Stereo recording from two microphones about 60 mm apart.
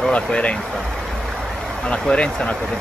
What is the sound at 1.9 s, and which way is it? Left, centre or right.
Speech, centre.